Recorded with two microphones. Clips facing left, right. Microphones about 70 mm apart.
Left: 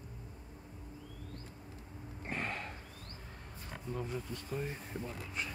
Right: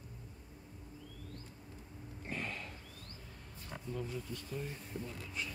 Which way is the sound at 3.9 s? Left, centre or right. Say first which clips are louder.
Left 2 dB; left.